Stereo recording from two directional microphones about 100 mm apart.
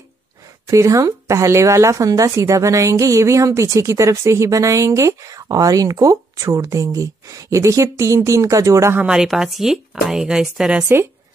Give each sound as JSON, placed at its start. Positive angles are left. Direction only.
{"t": 0.7, "sound": "speech", "side_deg": -35}
{"t": 9.0, "sound": "speech", "side_deg": -5}